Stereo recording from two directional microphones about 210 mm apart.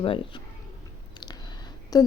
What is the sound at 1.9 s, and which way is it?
Speech, 15° left (ahead or behind).